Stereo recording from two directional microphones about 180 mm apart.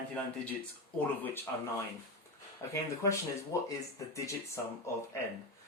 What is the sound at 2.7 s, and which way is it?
Speech, 15° left (ahead or behind).